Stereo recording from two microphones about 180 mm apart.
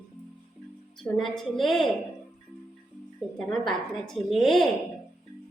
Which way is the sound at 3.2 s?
Centre (ahead or behind).